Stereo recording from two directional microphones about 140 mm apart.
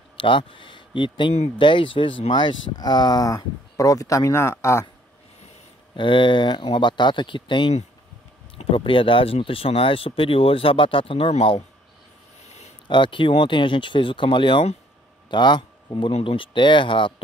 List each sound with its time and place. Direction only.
0.2 s speech: 35° left (ahead or behind); by 4.8 s 20° left (ahead or behind)
5.9 s speech: 35° left (ahead or behind)
12.4 s a sound: 50° left (ahead or behind)
12.8 s speech: 35° left (ahead or behind)
16.1 s speech: 45° left (ahead or behind)